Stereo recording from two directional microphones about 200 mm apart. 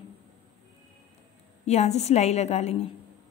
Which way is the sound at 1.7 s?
35° left (ahead or behind).